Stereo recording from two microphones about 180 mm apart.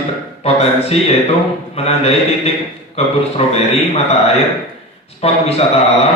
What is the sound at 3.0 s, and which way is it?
Speech, 35° left (ahead or behind).